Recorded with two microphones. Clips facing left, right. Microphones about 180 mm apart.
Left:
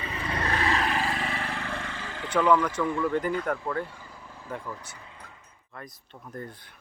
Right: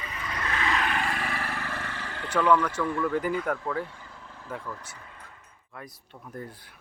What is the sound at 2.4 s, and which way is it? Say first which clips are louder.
Speech: even; 10° left (ahead or behind).